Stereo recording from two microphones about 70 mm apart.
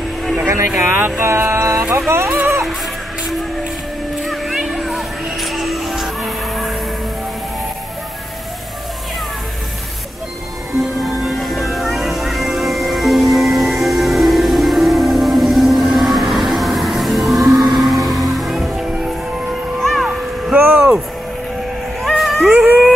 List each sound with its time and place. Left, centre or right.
0.2 s vehicle: centre
0.9 s speech: right
1.9 s music: right
4.2 s music: centre
10.8 s music: centre
19.8 s a sound: centre
20.5 s vehicle: centre
22.2 s cat: centre
22.5 s a sound: centre